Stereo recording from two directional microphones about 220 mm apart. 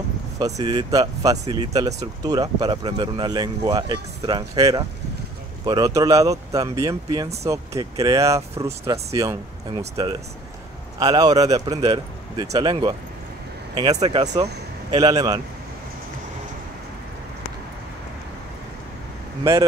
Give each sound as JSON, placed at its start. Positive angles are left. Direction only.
{"t": 0.6, "sound": "speech", "side_deg": -20}
{"t": 14.2, "sound": "speech", "side_deg": -30}
{"t": 14.9, "sound": "speech", "side_deg": -20}